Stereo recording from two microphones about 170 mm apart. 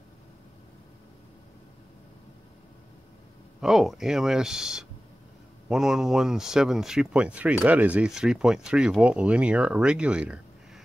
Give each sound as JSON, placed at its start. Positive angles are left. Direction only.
{"t": 3.6, "sound": "speech", "side_deg": 0}